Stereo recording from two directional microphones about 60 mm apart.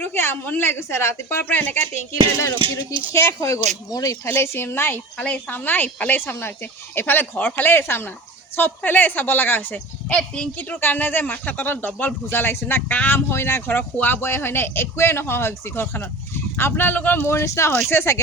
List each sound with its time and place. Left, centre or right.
0.0 s a woman's voice: left
1.5 s speech: left
3.1 s a woman's voice: left
3.4 s speech: left
4.2 s speech: left
5.1 s speech: left
5.5 s speech: left
9.7 s speech: centre
10.6 s speech: left
13.7 s speech: left
17.2 s a woman's voice: left